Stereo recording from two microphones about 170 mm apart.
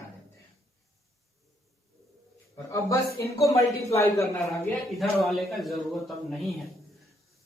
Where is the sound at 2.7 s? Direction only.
20° left (ahead or behind).